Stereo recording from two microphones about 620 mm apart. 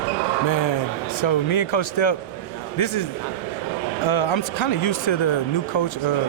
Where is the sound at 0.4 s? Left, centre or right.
Left.